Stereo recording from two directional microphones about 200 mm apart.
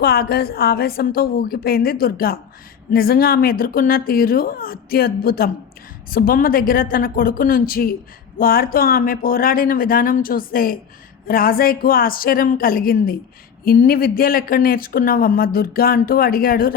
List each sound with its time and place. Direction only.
0.0 s speech: 50° left (ahead or behind)